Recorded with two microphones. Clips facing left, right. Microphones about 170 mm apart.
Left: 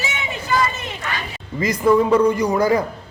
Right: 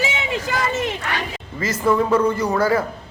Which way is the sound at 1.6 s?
15° left (ahead or behind).